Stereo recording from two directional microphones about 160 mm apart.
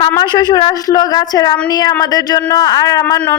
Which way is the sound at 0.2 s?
25° left (ahead or behind).